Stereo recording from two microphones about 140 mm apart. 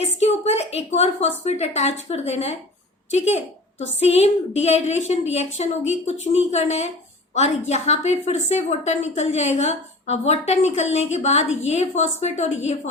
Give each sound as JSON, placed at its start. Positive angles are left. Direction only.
{"t": 0.0, "sound": "a woman's voice", "side_deg": 50}